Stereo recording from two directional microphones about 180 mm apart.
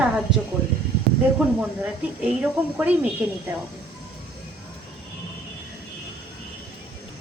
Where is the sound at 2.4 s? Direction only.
5° right (ahead or behind).